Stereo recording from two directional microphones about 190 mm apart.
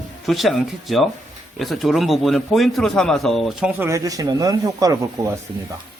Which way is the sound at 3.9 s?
20° right (ahead or behind).